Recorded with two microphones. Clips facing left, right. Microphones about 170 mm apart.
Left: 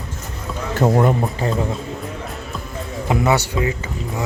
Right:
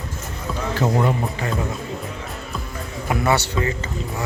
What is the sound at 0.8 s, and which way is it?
Speech, 45° left (ahead or behind).